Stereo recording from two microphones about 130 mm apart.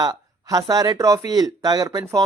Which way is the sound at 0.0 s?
30° right (ahead or behind).